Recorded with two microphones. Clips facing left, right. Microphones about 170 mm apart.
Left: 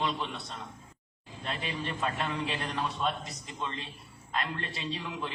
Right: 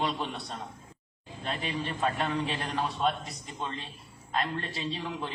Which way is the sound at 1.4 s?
30° right (ahead or behind).